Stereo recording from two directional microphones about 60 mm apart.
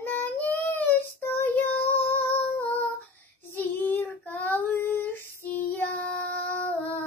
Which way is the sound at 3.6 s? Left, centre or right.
Left.